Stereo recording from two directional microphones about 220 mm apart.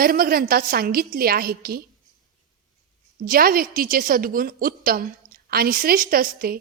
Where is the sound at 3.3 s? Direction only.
40° right (ahead or behind).